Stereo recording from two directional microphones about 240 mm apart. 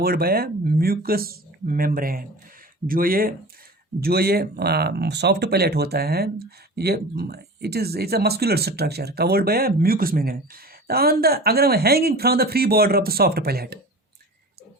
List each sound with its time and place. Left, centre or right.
0.0 s speech: right